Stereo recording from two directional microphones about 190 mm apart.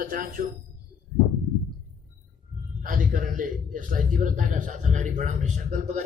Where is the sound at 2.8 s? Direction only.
45° right (ahead or behind).